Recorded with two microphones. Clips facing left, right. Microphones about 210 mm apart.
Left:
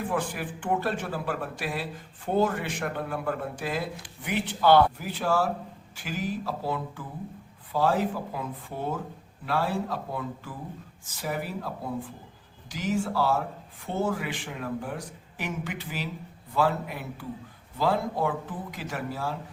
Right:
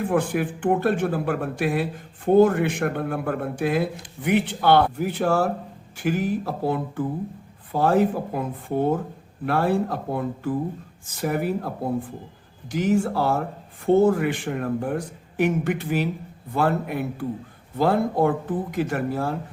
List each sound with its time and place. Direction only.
0.1 s speech: 55° right (ahead or behind)